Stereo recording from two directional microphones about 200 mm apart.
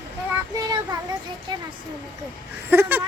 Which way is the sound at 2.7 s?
10° right (ahead or behind).